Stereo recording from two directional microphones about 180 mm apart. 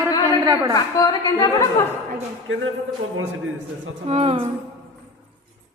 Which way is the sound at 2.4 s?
90° right.